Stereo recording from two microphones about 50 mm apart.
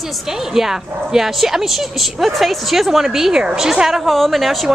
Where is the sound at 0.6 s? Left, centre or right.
Centre.